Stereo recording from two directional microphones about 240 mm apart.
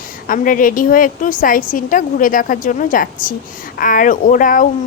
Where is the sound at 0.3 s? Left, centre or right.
Left.